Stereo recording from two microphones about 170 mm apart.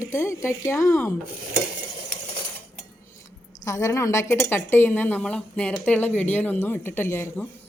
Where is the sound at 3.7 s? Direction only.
15° left (ahead or behind).